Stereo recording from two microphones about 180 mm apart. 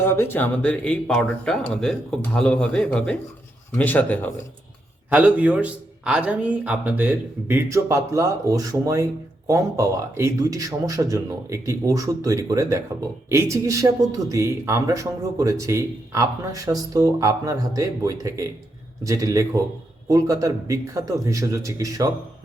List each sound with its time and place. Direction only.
0.0 s speech: 10° left (ahead or behind)
5.0 s a man's voice: 10° right (ahead or behind)